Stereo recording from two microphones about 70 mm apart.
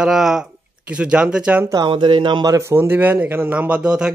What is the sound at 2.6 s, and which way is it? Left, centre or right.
Speech, right.